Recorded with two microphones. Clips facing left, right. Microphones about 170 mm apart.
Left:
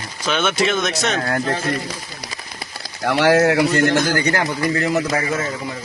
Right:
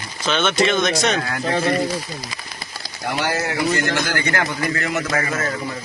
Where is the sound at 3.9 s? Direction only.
40° left (ahead or behind).